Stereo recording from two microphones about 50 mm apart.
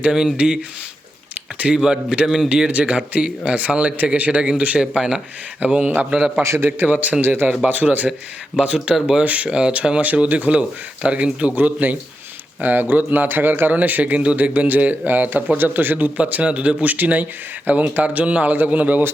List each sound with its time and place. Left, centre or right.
0.1 s speech: centre
5.5 s speech: right
6.4 s a man's voice: right
6.7 s a man's voice: right
9.5 s speech: centre
10.0 s a man's voice: right